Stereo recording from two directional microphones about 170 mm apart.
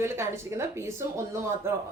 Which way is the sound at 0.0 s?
15° right (ahead or behind).